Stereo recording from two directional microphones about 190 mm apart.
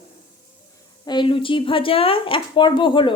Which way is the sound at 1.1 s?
25° left (ahead or behind).